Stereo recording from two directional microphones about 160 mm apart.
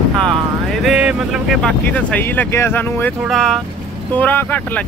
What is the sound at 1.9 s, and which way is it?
Speech, 10° left (ahead or behind).